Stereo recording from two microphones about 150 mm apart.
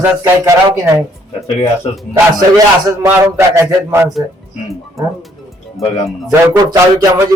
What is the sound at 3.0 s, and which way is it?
A man's voice, 15° right (ahead or behind).